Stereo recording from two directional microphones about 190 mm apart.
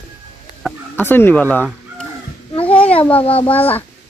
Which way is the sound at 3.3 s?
30° left (ahead or behind).